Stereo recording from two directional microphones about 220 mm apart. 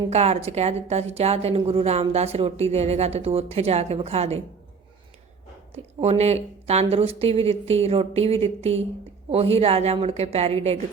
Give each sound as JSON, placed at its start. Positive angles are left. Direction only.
{"t": 0.1, "sound": "a woman's voice", "side_deg": -30}
{"t": 5.7, "sound": "a woman's voice", "side_deg": -30}